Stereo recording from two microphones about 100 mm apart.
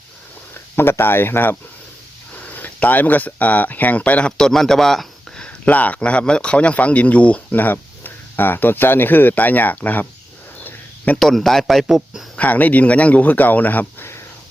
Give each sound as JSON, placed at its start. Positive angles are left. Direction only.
{"t": 0.5, "sound": "speech", "side_deg": 25}
{"t": 5.6, "sound": "speech", "side_deg": 15}
{"t": 10.6, "sound": "a sound", "side_deg": 20}
{"t": 11.2, "sound": "speech", "side_deg": 0}
{"t": 12.4, "sound": "speech", "side_deg": 15}